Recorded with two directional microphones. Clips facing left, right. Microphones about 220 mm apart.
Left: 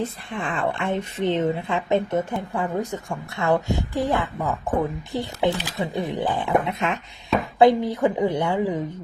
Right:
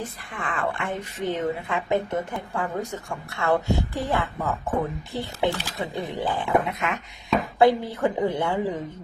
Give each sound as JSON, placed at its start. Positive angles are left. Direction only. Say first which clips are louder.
{"t": 0.0, "sound": "a woman's voice", "louder": "left 5 dB", "side_deg": 25}